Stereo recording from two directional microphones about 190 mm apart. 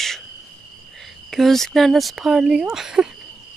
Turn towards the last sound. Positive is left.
turn(degrees=-5)  # may be behind; listen again after turning